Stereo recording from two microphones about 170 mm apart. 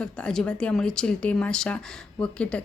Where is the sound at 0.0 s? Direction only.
5° left (ahead or behind).